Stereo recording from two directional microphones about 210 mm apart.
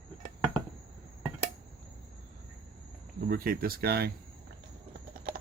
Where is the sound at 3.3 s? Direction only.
45° right (ahead or behind).